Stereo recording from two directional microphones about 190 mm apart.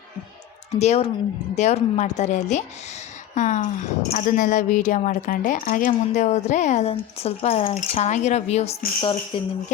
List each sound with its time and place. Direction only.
0.7 s a woman's voice: 35° left (ahead or behind)